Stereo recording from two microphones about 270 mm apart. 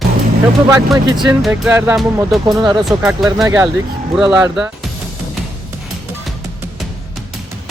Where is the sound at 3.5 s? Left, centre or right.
Centre.